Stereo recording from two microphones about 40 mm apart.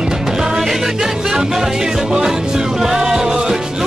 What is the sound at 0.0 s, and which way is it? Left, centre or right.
Music, centre.